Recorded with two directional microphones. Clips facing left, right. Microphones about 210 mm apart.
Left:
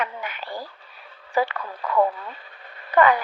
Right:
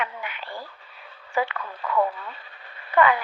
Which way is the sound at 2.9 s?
40° left (ahead or behind).